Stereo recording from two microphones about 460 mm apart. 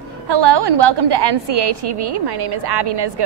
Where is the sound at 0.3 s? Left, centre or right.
Right.